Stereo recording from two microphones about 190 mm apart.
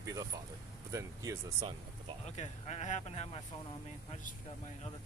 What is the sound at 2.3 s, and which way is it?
Speech, 35° left (ahead or behind).